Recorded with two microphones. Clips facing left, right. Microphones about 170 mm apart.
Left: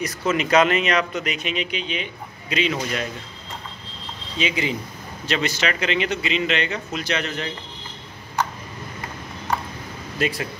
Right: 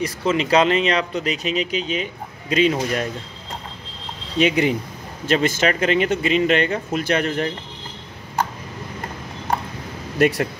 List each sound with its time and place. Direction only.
0.0 s speech: 30° right (ahead or behind)
4.4 s speech: 60° right (ahead or behind)
5.2 s speech: 50° right (ahead or behind)
10.1 s speech: 60° right (ahead or behind)